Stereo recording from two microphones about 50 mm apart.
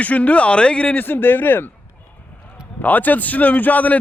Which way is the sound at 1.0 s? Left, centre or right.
Left.